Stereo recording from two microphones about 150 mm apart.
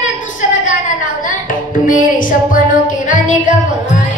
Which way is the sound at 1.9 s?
65° left (ahead or behind).